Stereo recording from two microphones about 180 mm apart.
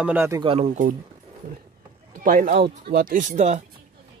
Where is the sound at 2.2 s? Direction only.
50° right (ahead or behind).